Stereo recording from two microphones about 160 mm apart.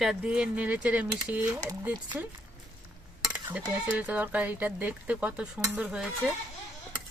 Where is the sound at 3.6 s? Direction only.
10° right (ahead or behind).